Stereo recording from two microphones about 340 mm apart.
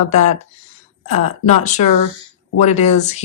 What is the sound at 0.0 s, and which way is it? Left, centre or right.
Speech, centre.